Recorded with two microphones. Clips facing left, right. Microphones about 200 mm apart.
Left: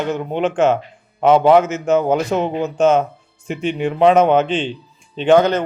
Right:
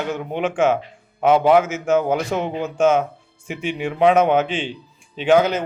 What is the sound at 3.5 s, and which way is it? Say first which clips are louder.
Speech: left 4 dB; 10° right (ahead or behind).